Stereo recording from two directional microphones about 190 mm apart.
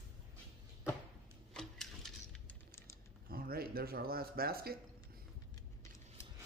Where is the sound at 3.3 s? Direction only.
50° right (ahead or behind).